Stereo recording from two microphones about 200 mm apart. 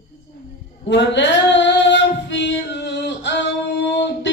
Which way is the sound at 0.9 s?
60° left (ahead or behind).